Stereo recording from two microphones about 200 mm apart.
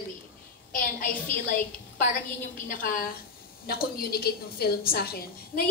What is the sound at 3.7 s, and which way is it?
A woman's voice, 50° left (ahead or behind).